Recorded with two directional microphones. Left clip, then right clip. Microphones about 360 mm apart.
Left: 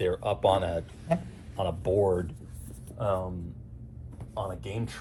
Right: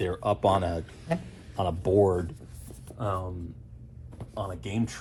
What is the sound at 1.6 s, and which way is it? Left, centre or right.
Speech, right.